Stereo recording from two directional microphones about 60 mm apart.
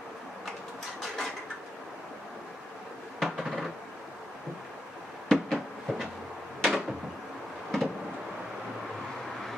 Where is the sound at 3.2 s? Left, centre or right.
Centre.